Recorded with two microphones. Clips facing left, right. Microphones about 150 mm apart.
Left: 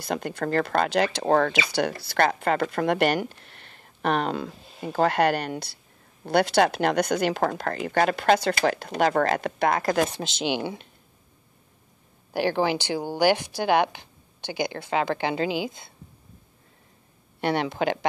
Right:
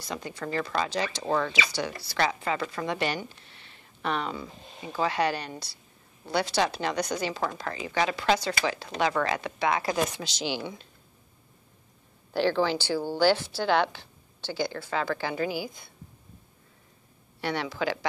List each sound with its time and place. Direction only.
0.0 s speech: 60° left (ahead or behind)
10.0 s speech: 25° left (ahead or behind)
10.4 s speech: 70° left (ahead or behind)
12.3 s speech: 15° left (ahead or behind)
17.4 s speech: 55° left (ahead or behind)